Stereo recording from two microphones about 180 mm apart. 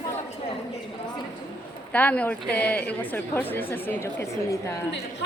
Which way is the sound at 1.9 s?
10° left (ahead or behind).